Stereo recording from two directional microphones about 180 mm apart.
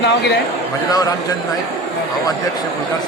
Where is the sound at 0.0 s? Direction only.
70° left (ahead or behind).